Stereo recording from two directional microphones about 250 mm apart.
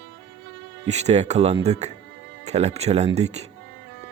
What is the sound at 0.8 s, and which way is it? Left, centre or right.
Speech, right.